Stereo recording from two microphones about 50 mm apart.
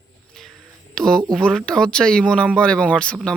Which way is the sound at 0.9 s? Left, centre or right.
Centre.